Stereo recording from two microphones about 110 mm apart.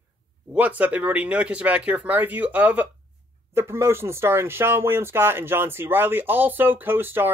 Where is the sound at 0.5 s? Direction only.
15° right (ahead or behind).